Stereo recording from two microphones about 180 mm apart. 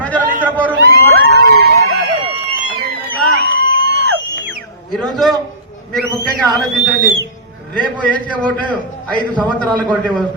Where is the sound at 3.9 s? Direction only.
80° right.